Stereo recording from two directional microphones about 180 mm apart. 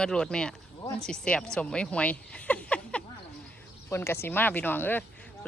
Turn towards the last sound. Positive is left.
turn(degrees=10)  # may be behind; listen again after turning